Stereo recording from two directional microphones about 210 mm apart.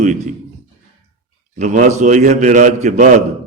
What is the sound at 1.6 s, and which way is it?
A man's voice, 35° right (ahead or behind).